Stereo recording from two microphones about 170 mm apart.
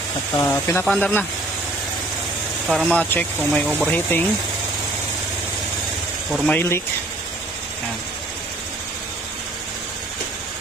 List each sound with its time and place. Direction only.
0.3 s speech: 15° left (ahead or behind)
2.6 s speech: centre (ahead or behind)
6.3 s speech: centre (ahead or behind)
6.6 s speech: 15° left (ahead or behind)